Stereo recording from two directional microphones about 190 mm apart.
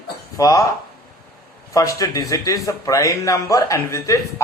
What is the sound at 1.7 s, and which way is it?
Speech, 15° left (ahead or behind).